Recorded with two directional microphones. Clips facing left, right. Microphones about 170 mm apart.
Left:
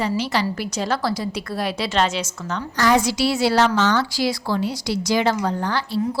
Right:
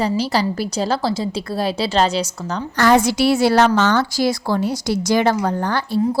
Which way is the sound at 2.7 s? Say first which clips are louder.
Right 4 dB; 55° right (ahead or behind).